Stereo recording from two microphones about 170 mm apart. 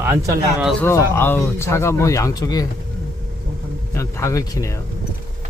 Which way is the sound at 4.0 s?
15° left (ahead or behind).